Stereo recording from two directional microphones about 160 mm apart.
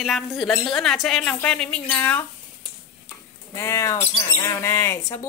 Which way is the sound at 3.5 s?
15° left (ahead or behind).